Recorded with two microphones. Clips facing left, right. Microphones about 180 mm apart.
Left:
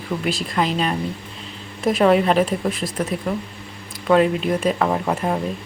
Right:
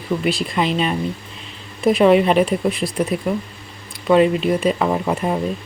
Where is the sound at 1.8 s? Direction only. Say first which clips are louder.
Right 3 dB; 10° right (ahead or behind).